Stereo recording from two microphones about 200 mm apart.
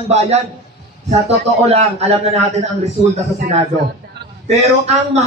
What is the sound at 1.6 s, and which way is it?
Speech, 30° right (ahead or behind).